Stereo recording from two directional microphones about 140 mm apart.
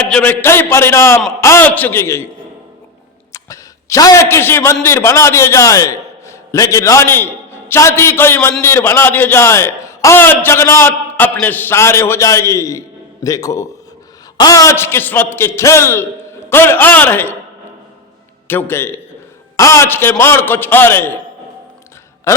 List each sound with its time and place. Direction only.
0.1 s a man's voice: 10° left (ahead or behind)
3.3 s a man's voice: 25° left (ahead or behind)
18.4 s a man's voice: 15° left (ahead or behind)